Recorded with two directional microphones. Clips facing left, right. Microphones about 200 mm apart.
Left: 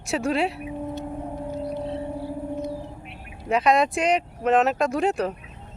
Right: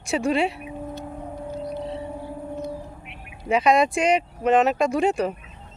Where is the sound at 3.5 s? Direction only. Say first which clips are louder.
Right 1 dB; centre (ahead or behind).